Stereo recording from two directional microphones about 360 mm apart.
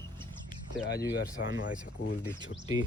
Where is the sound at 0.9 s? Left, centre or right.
Left.